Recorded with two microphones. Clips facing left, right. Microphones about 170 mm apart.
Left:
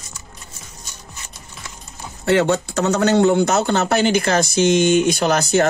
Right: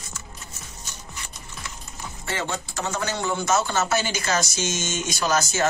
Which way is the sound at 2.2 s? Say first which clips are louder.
Left 14 dB; 70° left (ahead or behind).